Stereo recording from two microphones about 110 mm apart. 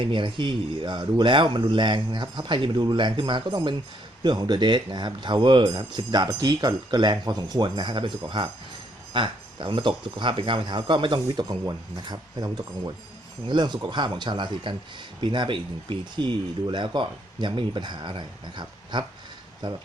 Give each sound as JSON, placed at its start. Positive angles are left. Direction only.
{"t": 0.0, "sound": "speech", "side_deg": -50}